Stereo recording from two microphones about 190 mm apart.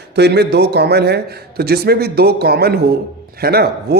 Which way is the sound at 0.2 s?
60° right (ahead or behind).